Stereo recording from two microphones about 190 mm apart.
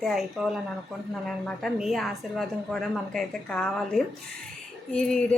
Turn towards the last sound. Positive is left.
turn(degrees=5)  # may be behind; listen again after turning